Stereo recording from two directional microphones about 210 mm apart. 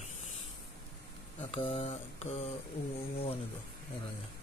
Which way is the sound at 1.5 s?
30° left (ahead or behind).